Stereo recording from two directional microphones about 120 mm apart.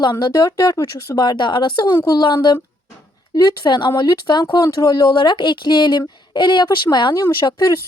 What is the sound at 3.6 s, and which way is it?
Speech, 40° left (ahead or behind).